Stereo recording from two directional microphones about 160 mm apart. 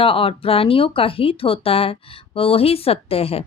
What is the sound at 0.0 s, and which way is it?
Speech, 35° left (ahead or behind).